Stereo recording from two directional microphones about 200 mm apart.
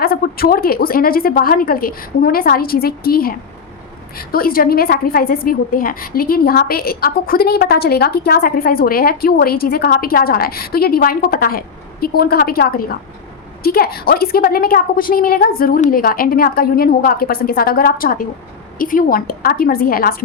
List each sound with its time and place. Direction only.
0.0 s a woman's voice: 50° left (ahead or behind)